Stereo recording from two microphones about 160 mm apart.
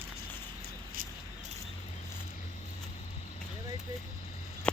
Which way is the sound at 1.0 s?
60° right (ahead or behind).